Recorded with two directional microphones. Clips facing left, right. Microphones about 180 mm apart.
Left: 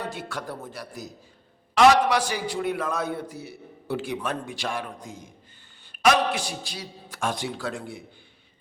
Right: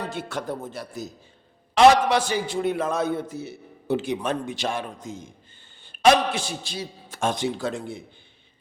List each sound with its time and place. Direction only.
0.1 s a man's voice: 25° right (ahead or behind)